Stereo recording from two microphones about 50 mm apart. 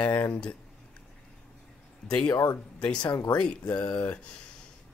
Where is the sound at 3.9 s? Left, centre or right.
Left.